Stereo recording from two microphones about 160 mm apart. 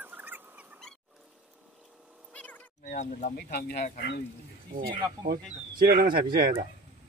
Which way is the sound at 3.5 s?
75° left (ahead or behind).